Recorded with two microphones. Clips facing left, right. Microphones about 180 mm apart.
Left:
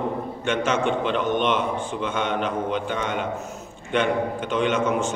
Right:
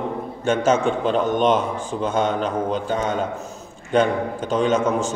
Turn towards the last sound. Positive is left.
turn(degrees=-40)  # may be behind; listen again after turning